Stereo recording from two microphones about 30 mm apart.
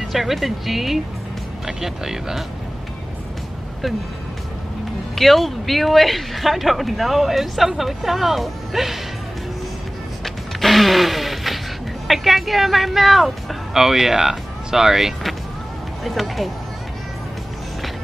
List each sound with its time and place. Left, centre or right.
0.1 s a woman's voice: centre
5.1 s a woman's voice: centre
10.2 s music: centre
12.1 s speech: centre
16.0 s a woman's voice: centre